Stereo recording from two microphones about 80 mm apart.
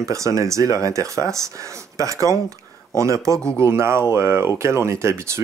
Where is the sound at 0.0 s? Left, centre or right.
Right.